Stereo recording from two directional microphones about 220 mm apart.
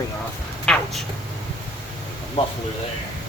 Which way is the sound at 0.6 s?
5° left (ahead or behind).